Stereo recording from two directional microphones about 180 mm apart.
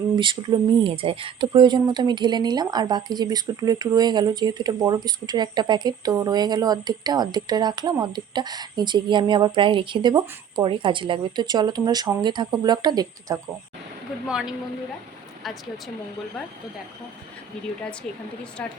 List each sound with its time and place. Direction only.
0.2 s speech: 25° right (ahead or behind)
14.3 s speech: 5° right (ahead or behind)